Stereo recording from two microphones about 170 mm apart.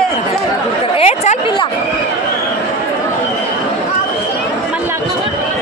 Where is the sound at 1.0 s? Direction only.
40° left (ahead or behind).